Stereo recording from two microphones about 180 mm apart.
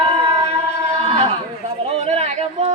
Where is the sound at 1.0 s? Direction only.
35° right (ahead or behind).